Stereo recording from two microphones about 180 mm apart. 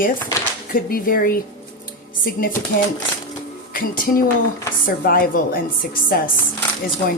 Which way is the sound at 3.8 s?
50° left (ahead or behind).